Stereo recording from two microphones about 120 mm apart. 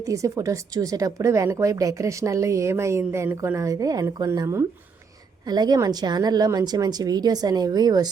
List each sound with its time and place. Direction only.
0.0 s a woman's voice: 25° right (ahead or behind)
5.5 s speech: 35° right (ahead or behind)